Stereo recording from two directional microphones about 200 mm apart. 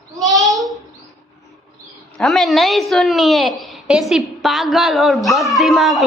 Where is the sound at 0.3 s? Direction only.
Centre (ahead or behind).